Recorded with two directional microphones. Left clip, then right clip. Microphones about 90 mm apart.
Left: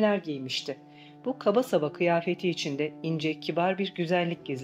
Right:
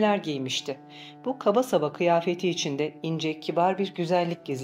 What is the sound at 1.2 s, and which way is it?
Speech, 60° right (ahead or behind).